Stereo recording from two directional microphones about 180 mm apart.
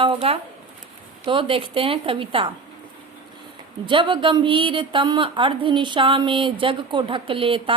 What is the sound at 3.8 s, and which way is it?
A woman's voice, 25° right (ahead or behind).